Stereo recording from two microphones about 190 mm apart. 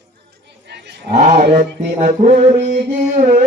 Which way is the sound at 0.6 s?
60° right (ahead or behind).